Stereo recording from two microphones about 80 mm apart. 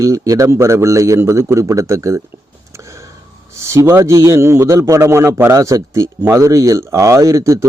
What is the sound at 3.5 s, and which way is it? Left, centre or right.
Speech, right.